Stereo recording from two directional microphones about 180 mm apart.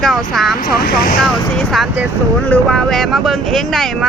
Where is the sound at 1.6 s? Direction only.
Centre (ahead or behind).